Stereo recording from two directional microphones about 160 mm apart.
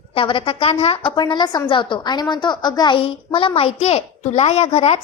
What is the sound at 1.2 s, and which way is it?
A woman's voice, 25° left (ahead or behind).